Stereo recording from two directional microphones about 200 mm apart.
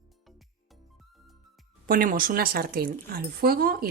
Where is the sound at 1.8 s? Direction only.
45° right (ahead or behind).